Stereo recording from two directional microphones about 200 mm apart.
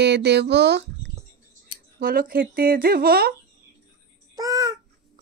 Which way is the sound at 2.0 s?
45° right (ahead or behind).